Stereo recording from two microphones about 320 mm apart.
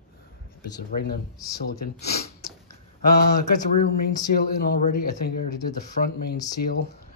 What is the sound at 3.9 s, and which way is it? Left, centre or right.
Speech, left.